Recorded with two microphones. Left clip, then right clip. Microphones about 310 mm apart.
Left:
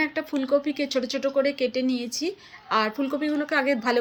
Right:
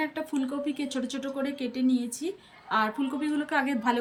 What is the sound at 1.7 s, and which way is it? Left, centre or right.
Speech, left.